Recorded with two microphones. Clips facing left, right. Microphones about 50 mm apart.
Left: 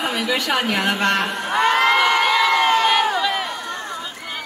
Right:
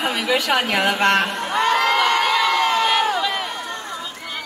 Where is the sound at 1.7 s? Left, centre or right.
Left.